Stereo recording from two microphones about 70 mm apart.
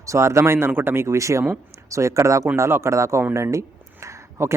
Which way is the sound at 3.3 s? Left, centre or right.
Right.